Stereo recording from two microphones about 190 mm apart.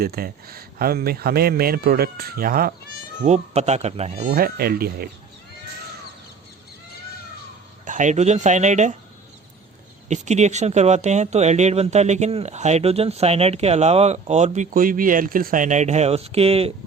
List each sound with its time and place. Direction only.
0.0 s speech: 50° right (ahead or behind)
3.2 s speech: 35° right (ahead or behind)
4.3 s speech: 50° right (ahead or behind)
7.9 s speech: 40° right (ahead or behind)
10.1 s speech: 35° right (ahead or behind)